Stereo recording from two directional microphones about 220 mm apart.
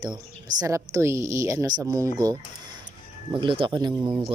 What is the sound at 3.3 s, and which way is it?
Speech, 20° right (ahead or behind).